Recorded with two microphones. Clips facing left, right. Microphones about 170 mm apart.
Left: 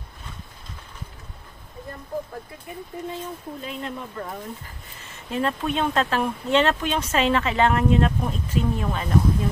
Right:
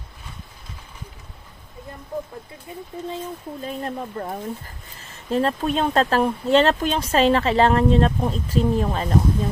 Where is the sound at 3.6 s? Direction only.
40° right (ahead or behind).